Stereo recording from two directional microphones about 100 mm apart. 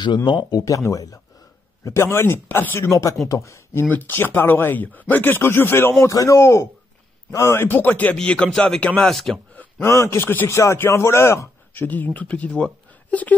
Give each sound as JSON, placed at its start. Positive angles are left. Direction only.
{"t": 0.0, "sound": "speech", "side_deg": 50}
{"t": 0.6, "sound": "speech", "side_deg": 35}
{"t": 9.6, "sound": "a man's voice", "side_deg": 25}